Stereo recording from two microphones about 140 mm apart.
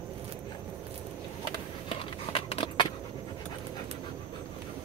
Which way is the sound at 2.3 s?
40° left (ahead or behind).